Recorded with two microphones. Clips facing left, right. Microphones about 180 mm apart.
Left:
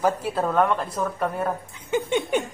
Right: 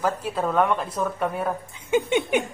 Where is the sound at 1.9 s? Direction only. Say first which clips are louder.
Right 2 dB; 20° right (ahead or behind).